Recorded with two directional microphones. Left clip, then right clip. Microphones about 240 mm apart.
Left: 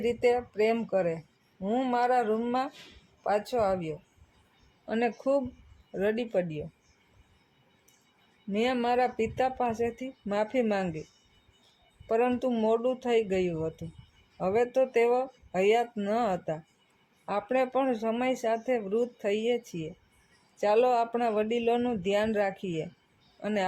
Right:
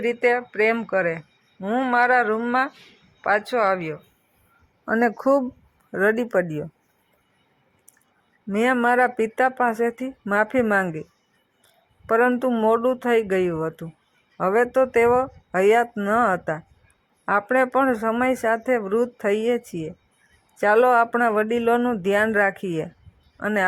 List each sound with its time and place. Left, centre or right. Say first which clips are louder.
0.0 s speech: right 6 dB; centre
8.5 s speech: right 8 dB; centre
12.0 s a woman's voice: right 8 dB; centre